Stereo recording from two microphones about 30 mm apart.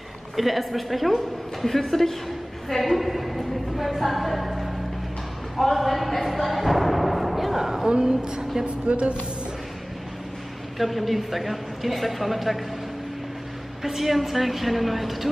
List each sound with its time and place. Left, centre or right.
0.4 s speech: centre
2.8 s a woman's voice: centre; by 8.6 s right
8.6 s speech: right
10.8 s speech: centre
13.8 s speech: centre